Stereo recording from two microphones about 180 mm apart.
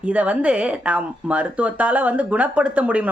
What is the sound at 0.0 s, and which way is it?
Speech, 5° right (ahead or behind).